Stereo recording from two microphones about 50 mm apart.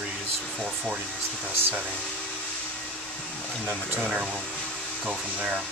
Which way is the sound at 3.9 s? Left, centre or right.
Right.